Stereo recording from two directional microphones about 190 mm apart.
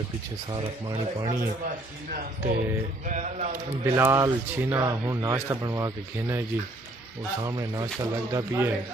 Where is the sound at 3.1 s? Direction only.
40° right (ahead or behind).